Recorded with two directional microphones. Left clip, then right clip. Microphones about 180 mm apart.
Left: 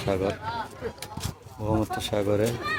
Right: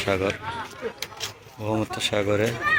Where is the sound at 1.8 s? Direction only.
10° left (ahead or behind).